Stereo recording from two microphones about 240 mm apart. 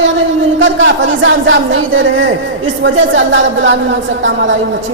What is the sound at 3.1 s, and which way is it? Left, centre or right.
Speech, right.